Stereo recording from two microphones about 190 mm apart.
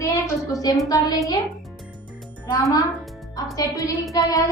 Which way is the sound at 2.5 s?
15° left (ahead or behind).